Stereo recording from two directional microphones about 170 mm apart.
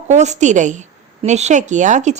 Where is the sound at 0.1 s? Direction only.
45° right (ahead or behind).